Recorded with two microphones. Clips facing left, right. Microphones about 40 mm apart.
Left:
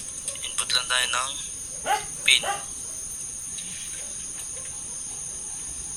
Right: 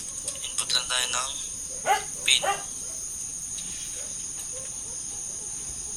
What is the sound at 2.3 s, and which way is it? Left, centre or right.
Speech, centre.